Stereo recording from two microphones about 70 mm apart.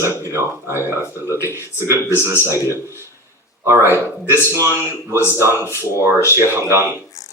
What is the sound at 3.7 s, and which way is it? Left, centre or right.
Speech, right.